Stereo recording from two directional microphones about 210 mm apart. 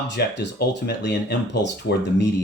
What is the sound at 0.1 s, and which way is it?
Speech, 55° left (ahead or behind).